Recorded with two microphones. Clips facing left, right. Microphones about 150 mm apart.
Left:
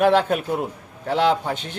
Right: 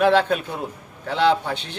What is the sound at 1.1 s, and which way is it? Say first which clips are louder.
Speech: even; 10° left (ahead or behind).